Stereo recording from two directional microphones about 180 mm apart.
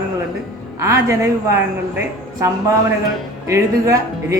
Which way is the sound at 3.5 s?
15° right (ahead or behind).